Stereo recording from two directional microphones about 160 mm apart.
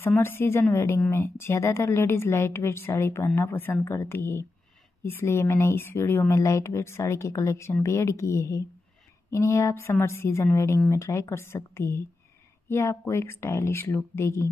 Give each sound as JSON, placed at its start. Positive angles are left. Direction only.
{"t": 0.0, "sound": "speech", "side_deg": 15}